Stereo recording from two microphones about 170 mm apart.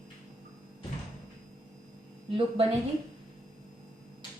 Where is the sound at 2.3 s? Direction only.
35° right (ahead or behind).